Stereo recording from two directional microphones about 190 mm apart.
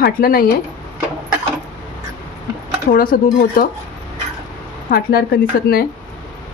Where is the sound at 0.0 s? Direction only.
50° left (ahead or behind).